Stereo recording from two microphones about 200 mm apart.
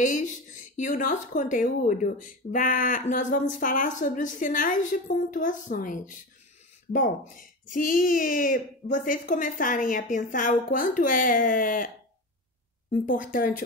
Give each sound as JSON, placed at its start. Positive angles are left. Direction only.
{"t": 0.0, "sound": "speech", "side_deg": 40}
{"t": 13.0, "sound": "speech", "side_deg": 40}